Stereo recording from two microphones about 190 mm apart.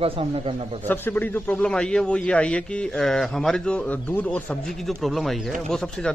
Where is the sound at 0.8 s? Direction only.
10° left (ahead or behind).